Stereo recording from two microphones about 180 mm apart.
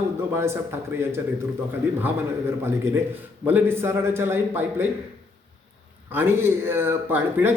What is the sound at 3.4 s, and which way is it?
A man's voice, 10° right (ahead or behind).